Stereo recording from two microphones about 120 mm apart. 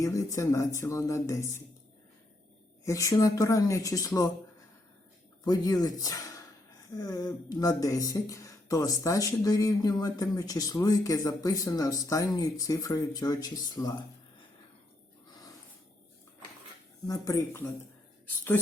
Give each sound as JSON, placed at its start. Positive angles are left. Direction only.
{"t": 0.0, "sound": "speech", "side_deg": 25}
{"t": 2.8, "sound": "speech", "side_deg": 25}
{"t": 5.5, "sound": "speech", "side_deg": 30}
{"t": 17.1, "sound": "speech", "side_deg": 25}